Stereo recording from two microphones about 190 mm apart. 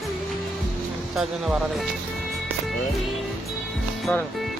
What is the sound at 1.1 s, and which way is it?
Speech, centre (ahead or behind).